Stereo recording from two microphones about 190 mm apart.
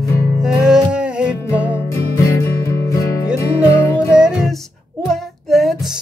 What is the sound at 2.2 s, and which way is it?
Music, 15° left (ahead or behind).